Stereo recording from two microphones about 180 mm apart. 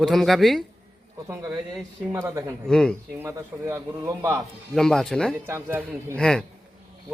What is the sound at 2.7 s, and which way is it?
Speech, 5° left (ahead or behind).